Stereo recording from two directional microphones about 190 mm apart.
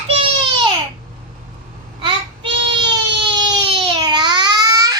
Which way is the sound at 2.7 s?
25° right (ahead or behind).